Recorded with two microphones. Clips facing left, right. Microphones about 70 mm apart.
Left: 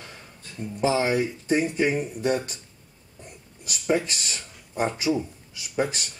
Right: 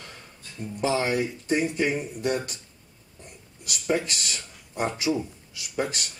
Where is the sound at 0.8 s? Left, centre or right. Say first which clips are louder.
Left 2 dB; centre.